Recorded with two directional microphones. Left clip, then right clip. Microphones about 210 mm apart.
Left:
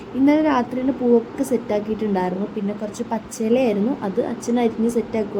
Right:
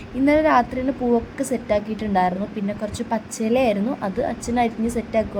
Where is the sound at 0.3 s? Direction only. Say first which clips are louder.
Right 2 dB; 20° right (ahead or behind).